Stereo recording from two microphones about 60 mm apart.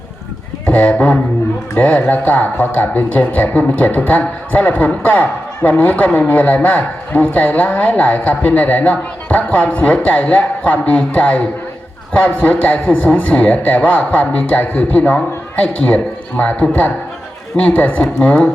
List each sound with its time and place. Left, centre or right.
0.6 s speech: left